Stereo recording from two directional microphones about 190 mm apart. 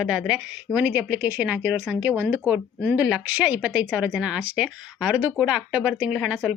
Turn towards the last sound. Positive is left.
turn(degrees=-5)  # may be behind; listen again after turning